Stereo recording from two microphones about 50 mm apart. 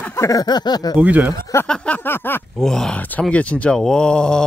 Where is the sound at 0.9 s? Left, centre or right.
Right.